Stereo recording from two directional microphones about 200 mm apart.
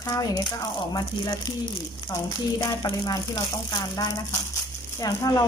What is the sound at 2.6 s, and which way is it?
Speech, 15° left (ahead or behind).